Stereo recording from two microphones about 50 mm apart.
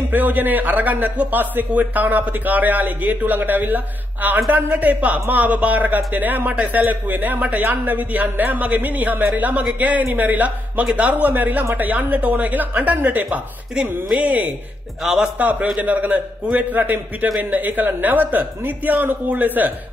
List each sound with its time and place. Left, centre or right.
0.1 s a man's voice: right
15.0 s speech: centre
15.4 s a man's voice: right